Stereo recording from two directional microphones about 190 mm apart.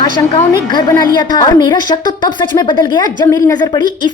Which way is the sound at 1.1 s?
25° left (ahead or behind).